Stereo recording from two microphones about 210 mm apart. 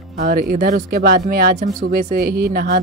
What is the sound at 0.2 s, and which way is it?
Speech, 45° right (ahead or behind).